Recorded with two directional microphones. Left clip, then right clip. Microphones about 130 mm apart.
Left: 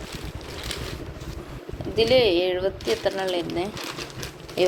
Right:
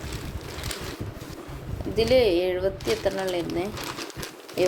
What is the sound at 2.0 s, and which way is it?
Speech, 25° right (ahead or behind).